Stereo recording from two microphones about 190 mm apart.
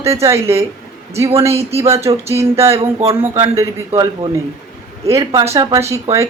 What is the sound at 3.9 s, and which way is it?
Speech, 30° right (ahead or behind).